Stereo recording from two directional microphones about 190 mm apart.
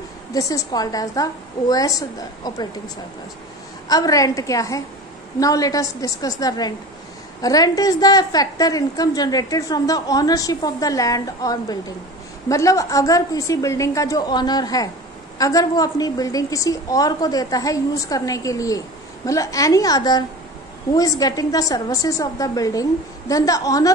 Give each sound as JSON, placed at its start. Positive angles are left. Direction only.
{"t": 0.3, "sound": "a woman's voice", "side_deg": 15}
{"t": 3.9, "sound": "a woman's voice", "side_deg": 20}